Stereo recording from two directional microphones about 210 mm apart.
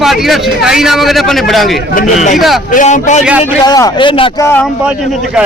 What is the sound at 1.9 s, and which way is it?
A man's voice, 35° left (ahead or behind).